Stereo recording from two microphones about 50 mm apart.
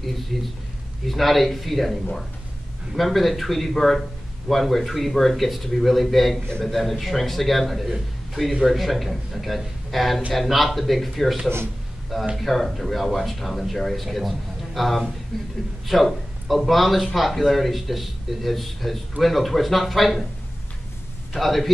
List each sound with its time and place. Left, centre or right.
0.3 s a man's voice: centre
21.4 s a man's voice: centre